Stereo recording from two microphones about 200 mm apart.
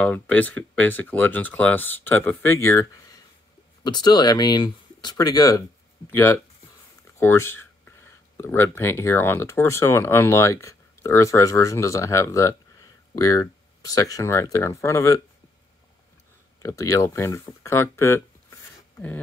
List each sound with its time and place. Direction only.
0.0 s speech: 10° left (ahead or behind)
7.2 s a sound: 10° left (ahead or behind)
8.4 s speech: 10° left (ahead or behind)
16.6 s speech: 15° left (ahead or behind)